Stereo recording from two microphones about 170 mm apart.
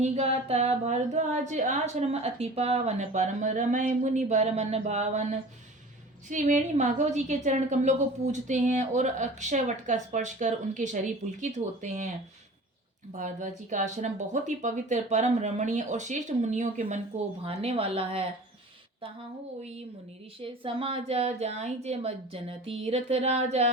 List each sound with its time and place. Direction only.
0.0 s speech: 40° right (ahead or behind)
6.2 s a woman's voice: 45° right (ahead or behind)
13.1 s a woman's voice: 45° right (ahead or behind)
20.4 s speech: 35° right (ahead or behind)